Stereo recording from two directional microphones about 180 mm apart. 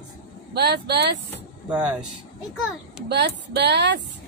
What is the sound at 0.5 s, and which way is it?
Speech, 70° right (ahead or behind).